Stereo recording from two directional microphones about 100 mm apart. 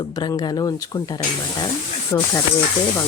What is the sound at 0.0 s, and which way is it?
A woman's voice, 45° left (ahead or behind).